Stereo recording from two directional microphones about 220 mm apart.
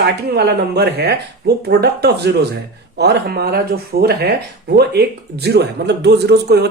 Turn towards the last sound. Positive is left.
turn(degrees=-50)  # may be behind; listen again after turning